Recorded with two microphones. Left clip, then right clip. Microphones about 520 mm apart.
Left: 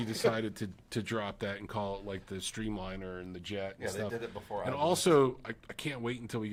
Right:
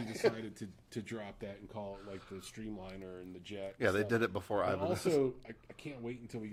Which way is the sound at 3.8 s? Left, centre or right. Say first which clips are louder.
Right 5 dB; right.